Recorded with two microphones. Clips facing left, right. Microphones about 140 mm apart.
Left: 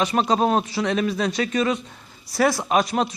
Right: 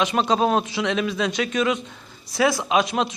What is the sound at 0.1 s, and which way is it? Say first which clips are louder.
Speech: even; 5° left (ahead or behind).